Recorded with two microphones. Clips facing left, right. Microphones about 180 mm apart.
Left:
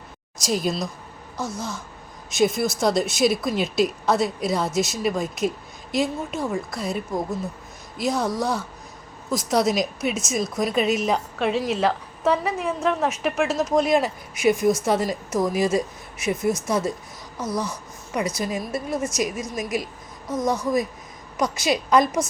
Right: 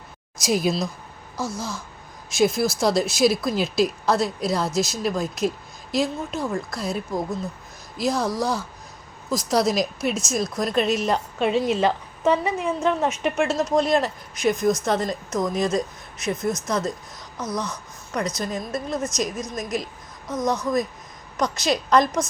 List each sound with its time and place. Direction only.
0.4 s speech: 5° right (ahead or behind)
1.4 s speech: 20° left (ahead or behind)
2.3 s a woman's voice: centre (ahead or behind)
20.3 s speech: 25° left (ahead or behind)
21.3 s speech: 5° left (ahead or behind)